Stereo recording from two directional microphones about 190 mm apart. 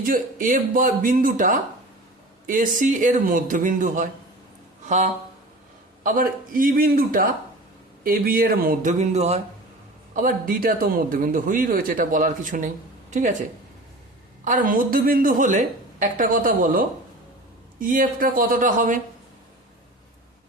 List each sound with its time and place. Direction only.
0.0 s a man's voice: 45° right (ahead or behind)
6.0 s a man's voice: 45° right (ahead or behind)
10.2 s a man's voice: 45° right (ahead or behind)
14.4 s a man's voice: 45° right (ahead or behind)